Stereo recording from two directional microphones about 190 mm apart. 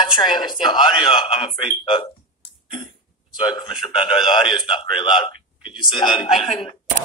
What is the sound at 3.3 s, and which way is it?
Speech, 25° left (ahead or behind).